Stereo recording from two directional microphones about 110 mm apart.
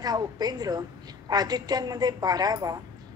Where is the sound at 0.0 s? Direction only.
35° right (ahead or behind).